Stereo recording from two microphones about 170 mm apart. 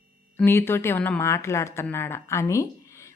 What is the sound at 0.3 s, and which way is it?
Speech, 15° left (ahead or behind).